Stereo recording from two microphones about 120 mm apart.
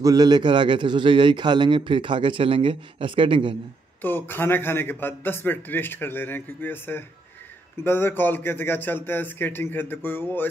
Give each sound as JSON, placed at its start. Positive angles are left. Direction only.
{"t": 0.0, "sound": "a man's voice", "side_deg": -30}
{"t": 4.0, "sound": "a man's voice", "side_deg": 15}